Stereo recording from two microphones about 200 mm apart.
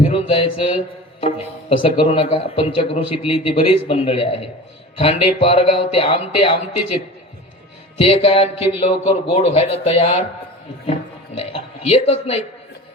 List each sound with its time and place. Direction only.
0.1 s a sound: 30° left (ahead or behind)
1.8 s a man's voice: 25° left (ahead or behind)
7.9 s a man's voice: 30° left (ahead or behind)
11.3 s a man's voice: 30° left (ahead or behind)